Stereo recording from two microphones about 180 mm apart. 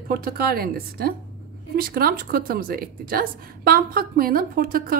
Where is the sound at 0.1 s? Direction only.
55° right (ahead or behind).